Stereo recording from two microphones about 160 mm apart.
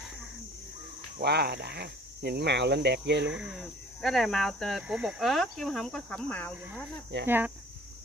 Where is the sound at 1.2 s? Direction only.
85° right.